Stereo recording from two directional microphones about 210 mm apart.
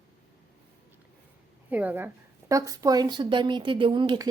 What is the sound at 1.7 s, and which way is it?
Speech, 10° right (ahead or behind).